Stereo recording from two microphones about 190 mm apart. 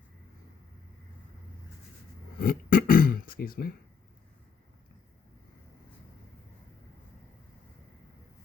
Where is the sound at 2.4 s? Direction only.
50° left (ahead or behind).